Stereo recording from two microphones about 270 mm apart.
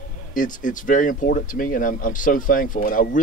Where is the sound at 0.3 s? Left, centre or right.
Left.